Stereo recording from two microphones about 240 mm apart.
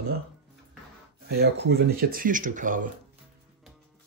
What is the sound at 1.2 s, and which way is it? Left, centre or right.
Speech, right.